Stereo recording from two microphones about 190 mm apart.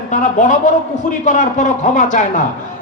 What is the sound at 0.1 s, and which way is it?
A man's voice, 40° left (ahead or behind).